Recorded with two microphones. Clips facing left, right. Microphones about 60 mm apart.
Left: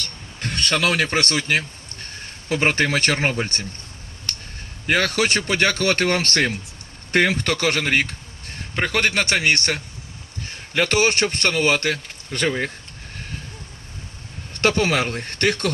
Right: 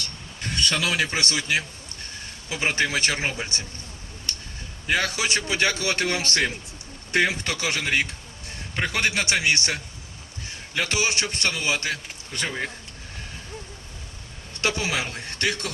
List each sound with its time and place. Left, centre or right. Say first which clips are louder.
0.0 s speech: left 3 dB; left
4.3 s a sound: left 2 dB; left
4.9 s a man's voice: left 4 dB; left
14.5 s a man's voice: left 7 dB; left